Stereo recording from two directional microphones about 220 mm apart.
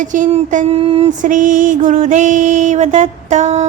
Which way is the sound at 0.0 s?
35° right (ahead or behind).